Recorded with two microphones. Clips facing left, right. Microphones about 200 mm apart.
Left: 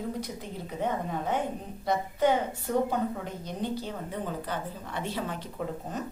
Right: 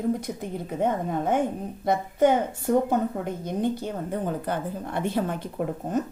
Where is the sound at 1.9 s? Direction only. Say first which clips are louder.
Right 4 dB; 50° right (ahead or behind).